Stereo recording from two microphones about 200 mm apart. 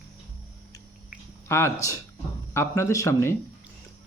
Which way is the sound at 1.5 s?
10° left (ahead or behind).